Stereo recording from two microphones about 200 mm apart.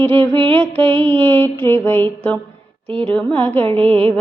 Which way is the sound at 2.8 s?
30° right (ahead or behind).